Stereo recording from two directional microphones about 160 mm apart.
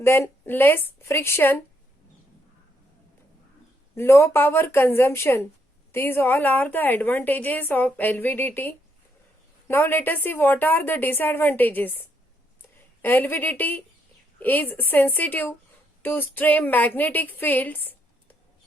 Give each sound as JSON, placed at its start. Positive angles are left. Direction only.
{"t": 0.0, "sound": "a woman's voice", "side_deg": 15}
{"t": 3.9, "sound": "a woman's voice", "side_deg": 15}